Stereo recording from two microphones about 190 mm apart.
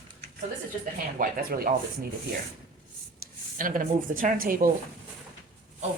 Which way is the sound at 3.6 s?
45° right (ahead or behind).